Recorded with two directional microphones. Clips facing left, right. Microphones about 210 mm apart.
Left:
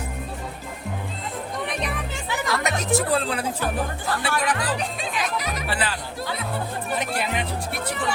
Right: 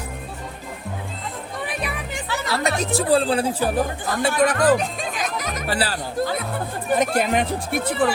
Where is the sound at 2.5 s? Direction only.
30° right (ahead or behind).